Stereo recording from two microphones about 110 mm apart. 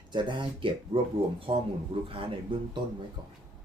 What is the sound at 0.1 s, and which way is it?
Speech, 45° right (ahead or behind).